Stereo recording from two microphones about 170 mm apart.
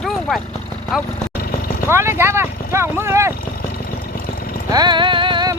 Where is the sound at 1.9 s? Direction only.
15° right (ahead or behind).